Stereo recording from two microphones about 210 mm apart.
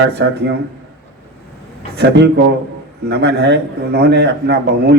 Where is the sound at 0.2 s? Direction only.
60° right (ahead or behind).